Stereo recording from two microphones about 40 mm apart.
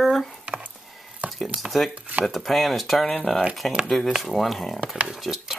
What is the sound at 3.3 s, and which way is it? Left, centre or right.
Speech, centre.